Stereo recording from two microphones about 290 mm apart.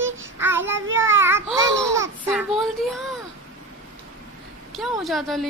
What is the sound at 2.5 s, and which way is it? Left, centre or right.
Speech, centre.